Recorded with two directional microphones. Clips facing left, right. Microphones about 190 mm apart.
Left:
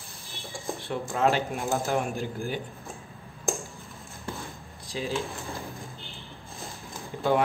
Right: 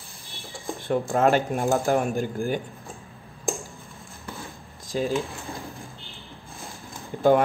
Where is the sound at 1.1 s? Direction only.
55° right (ahead or behind).